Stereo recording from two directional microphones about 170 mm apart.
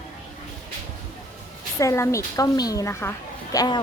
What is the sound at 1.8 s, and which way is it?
A woman's voice, 15° left (ahead or behind).